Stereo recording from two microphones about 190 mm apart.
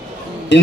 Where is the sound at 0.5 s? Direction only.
70° left (ahead or behind).